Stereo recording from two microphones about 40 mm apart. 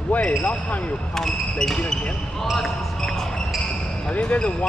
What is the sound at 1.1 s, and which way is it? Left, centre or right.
Speech, centre.